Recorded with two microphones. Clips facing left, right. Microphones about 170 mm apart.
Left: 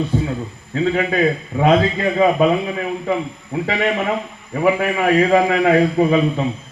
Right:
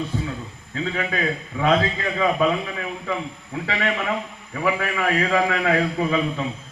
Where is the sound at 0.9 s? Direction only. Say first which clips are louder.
Left 6 dB; 40° left (ahead or behind).